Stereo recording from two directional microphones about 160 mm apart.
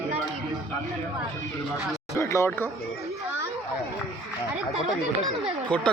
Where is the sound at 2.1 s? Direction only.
20° left (ahead or behind).